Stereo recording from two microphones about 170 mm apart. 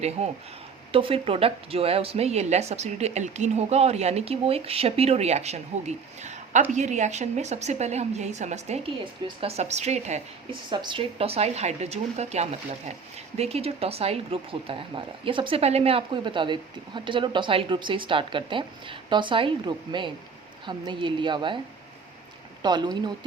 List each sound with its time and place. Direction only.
0.2 s speech: 40° right (ahead or behind)
10.7 s speech: 25° right (ahead or behind)
22.6 s speech: 25° right (ahead or behind)